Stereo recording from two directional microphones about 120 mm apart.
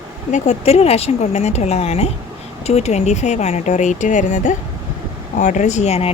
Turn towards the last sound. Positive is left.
turn(degrees=60)  # may be behind; listen again after turning